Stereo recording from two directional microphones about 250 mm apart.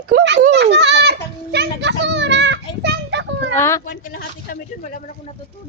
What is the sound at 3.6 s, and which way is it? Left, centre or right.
Speech, centre.